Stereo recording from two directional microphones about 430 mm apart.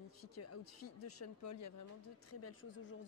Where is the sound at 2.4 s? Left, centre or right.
Left.